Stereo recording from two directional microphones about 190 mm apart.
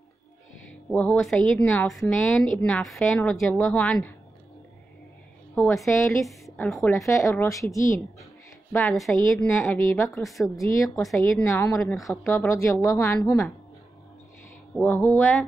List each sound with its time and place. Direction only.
0.7 s a woman's voice: 5° left (ahead or behind)
5.9 s a woman's voice: 10° left (ahead or behind)
6.2 s a sound: centre (ahead or behind)
6.6 s a woman's voice: centre (ahead or behind)
7.1 s a woman's voice: 15° left (ahead or behind)
8.7 s a woman's voice: 5° left (ahead or behind)
10.0 s a woman's voice: centre (ahead or behind)
10.5 s a woman's voice: 15° left (ahead or behind)
14.8 s a woman's voice: 10° left (ahead or behind)